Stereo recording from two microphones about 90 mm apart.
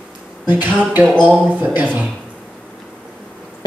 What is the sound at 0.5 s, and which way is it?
Speech, 20° right (ahead or behind).